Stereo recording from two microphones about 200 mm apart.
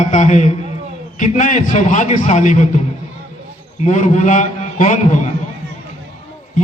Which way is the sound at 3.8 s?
35° left (ahead or behind).